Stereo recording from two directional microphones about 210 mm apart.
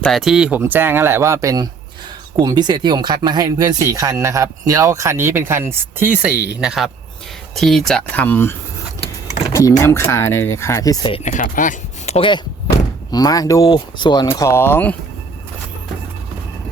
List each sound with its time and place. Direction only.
0.0 s speech: centre (ahead or behind)
6.3 s speech: 50° left (ahead or behind)
6.6 s speech: centre (ahead or behind); by 11.2 s 20° left (ahead or behind)
11.2 s speech: 35° left (ahead or behind); by 14.9 s 10° left (ahead or behind)